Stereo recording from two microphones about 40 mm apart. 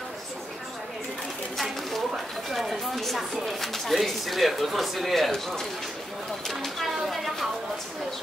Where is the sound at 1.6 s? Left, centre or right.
Centre.